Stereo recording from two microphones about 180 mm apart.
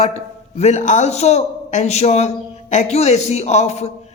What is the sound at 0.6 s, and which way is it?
A man's voice, 40° left (ahead or behind).